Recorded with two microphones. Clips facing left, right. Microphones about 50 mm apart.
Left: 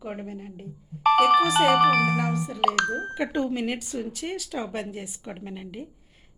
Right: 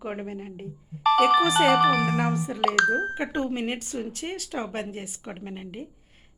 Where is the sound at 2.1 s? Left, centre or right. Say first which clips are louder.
Even; right.